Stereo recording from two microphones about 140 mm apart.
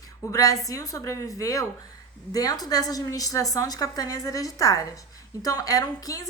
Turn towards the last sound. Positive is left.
turn(degrees=25)  # may be behind; listen again after turning